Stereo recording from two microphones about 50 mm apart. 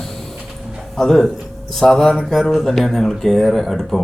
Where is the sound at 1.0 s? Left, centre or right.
Centre.